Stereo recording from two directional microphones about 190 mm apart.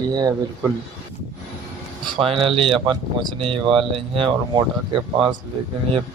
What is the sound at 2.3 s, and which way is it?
Speech, 30° right (ahead or behind).